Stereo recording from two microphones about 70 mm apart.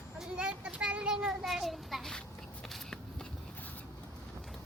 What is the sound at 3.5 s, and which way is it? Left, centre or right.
Vehicle, left.